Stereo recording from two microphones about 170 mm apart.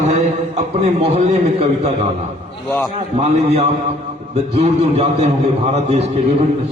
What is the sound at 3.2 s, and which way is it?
A man's voice, 40° right (ahead or behind).